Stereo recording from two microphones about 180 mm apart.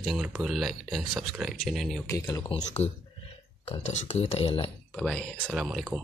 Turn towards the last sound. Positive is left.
turn(degrees=0)  # may be behind; listen again after turning